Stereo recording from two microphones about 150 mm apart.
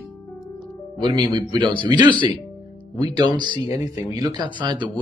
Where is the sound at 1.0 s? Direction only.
30° right (ahead or behind).